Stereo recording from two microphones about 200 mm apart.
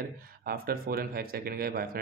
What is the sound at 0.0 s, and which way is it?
Speech, 45° right (ahead or behind).